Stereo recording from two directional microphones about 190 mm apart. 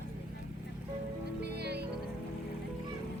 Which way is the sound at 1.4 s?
60° right (ahead or behind).